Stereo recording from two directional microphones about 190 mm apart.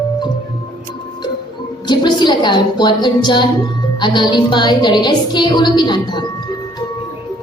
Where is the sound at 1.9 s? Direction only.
25° left (ahead or behind).